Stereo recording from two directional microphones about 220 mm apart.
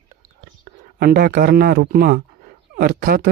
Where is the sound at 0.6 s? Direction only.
45° right (ahead or behind).